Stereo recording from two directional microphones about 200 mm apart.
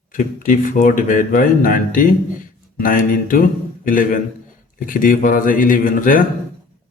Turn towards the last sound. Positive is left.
turn(degrees=45)  # may be behind; listen again after turning